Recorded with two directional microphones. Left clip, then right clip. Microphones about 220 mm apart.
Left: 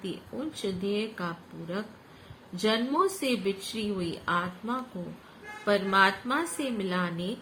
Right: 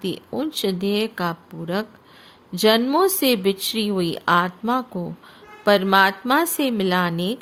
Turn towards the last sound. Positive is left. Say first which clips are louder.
# right 10 dB
turn(degrees=-60)  # may be behind; listen again after turning